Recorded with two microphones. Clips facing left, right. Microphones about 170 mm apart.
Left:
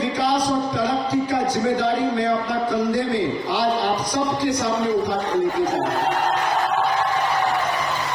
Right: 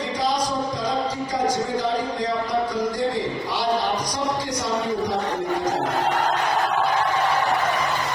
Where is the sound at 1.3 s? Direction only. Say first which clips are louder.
Left 3 dB; 60° left (ahead or behind).